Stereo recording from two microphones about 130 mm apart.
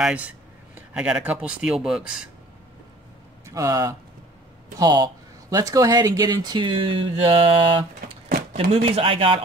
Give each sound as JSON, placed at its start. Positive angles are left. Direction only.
{"t": 0.0, "sound": "speech", "side_deg": -10}
{"t": 3.4, "sound": "speech", "side_deg": -25}